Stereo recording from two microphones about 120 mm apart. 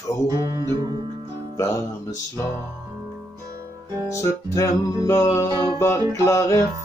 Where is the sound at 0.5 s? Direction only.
30° right (ahead or behind).